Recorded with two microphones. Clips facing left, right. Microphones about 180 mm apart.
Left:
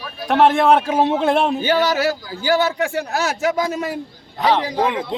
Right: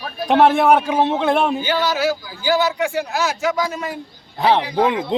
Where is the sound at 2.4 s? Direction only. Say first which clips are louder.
Even; 55° left (ahead or behind).